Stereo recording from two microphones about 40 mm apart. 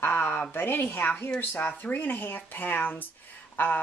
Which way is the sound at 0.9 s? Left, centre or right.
Left.